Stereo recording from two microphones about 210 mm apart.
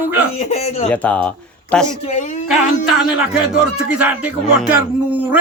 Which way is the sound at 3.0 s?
5° right (ahead or behind).